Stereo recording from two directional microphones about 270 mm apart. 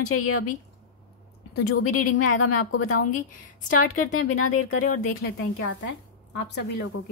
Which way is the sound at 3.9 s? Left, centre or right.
Left.